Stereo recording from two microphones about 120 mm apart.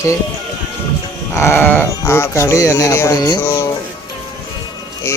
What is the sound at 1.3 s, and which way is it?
Speech, 20° left (ahead or behind).